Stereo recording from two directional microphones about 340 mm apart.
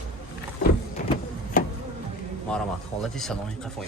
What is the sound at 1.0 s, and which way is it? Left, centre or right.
Printer, left.